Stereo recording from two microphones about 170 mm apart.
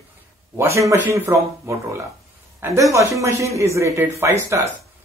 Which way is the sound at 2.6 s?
15° right (ahead or behind).